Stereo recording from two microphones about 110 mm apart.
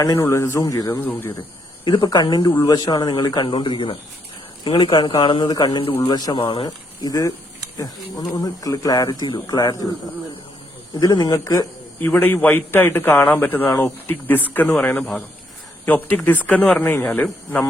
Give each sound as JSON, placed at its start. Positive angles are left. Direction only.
{"t": 0.0, "sound": "speech", "side_deg": 30}
{"t": 1.8, "sound": "speech", "side_deg": 40}
{"t": 6.7, "sound": "speech", "side_deg": 30}
{"t": 10.9, "sound": "speech", "side_deg": 35}
{"t": 11.9, "sound": "a man's voice", "side_deg": 20}